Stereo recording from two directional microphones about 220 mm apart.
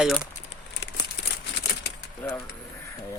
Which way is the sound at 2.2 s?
5° left (ahead or behind).